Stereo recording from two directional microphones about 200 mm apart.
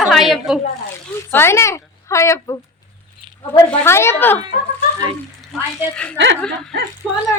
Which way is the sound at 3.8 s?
10° left (ahead or behind).